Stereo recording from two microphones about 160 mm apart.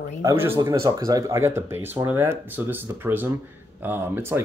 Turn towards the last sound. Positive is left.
turn(degrees=-15)  # may be behind; listen again after turning